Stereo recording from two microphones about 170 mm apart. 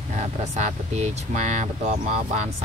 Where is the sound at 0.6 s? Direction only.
45° right (ahead or behind).